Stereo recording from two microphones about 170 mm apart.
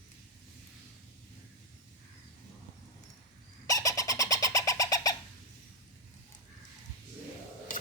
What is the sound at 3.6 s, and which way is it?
Bird, 20° left (ahead or behind).